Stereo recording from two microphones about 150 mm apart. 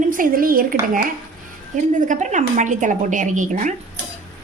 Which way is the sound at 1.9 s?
55° right (ahead or behind).